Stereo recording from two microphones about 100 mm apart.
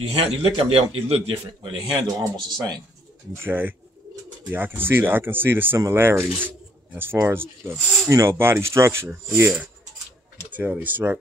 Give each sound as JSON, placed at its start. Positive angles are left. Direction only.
{"t": 0.2, "sound": "a man's voice", "side_deg": -90}
{"t": 0.5, "sound": "a man's voice", "side_deg": -70}
{"t": 1.6, "sound": "speech", "side_deg": -45}
{"t": 3.3, "sound": "speech", "side_deg": -20}
{"t": 10.5, "sound": "speech", "side_deg": -15}